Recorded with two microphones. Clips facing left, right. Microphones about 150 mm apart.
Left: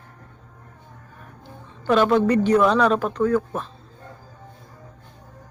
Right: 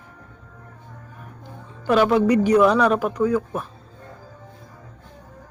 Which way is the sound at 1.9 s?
10° right (ahead or behind).